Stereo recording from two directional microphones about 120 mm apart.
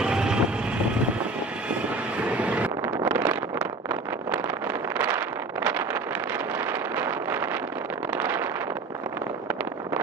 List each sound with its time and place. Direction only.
0.0 s vehicle: 5° right (ahead or behind)
2.2 s vehicle: 10° right (ahead or behind)
4.9 s wind noise: 15° right (ahead or behind)
7.0 s wind noise: 15° right (ahead or behind)
8.2 s vehicle: 20° right (ahead or behind)